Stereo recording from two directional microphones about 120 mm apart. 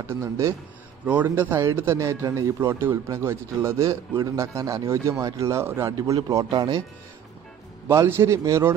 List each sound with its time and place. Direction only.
0.0 s a man's voice: 25° right (ahead or behind)
1.0 s a man's voice: 15° right (ahead or behind); by 6.8 s 35° right (ahead or behind)
7.9 s a man's voice: 25° right (ahead or behind)